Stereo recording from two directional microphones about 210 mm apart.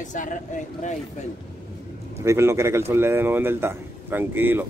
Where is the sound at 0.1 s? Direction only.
35° left (ahead or behind).